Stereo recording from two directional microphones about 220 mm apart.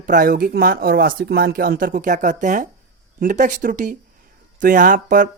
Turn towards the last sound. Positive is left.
turn(degrees=-35)  # may be behind; listen again after turning